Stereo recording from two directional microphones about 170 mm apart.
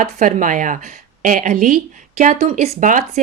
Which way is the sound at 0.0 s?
50° right (ahead or behind).